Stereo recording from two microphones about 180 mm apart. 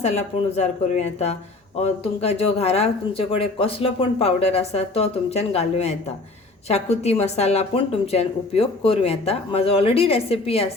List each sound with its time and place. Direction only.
0.0 s a woman's voice: 40° left (ahead or behind)